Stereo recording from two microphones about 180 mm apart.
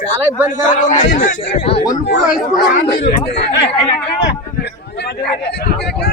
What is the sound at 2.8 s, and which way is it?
Speech, 70° left (ahead or behind).